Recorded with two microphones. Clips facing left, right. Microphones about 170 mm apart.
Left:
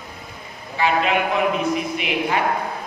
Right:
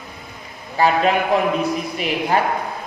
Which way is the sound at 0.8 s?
40° right (ahead or behind).